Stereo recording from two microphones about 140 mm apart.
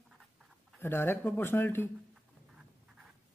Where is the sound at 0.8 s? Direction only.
15° left (ahead or behind).